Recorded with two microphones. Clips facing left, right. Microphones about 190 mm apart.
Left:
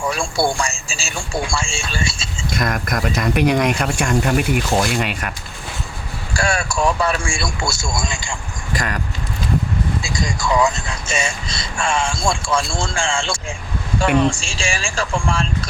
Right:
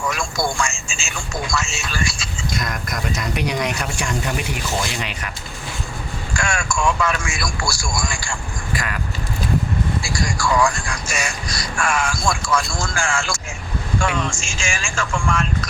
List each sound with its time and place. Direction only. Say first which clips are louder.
0.0 s speech: left 3 dB; 30° left (ahead or behind)
2.5 s speech: left 6 dB; 55° left (ahead or behind)
6.3 s speech: left 3 dB; 35° left (ahead or behind)
8.7 s speech: left 3 dB; 40° left (ahead or behind)
10.0 s speech: even; 20° left (ahead or behind)